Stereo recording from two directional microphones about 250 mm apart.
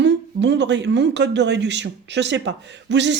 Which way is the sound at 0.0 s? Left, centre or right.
Right.